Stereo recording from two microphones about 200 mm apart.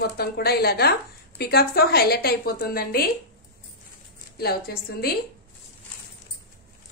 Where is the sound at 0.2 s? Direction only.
50° left (ahead or behind).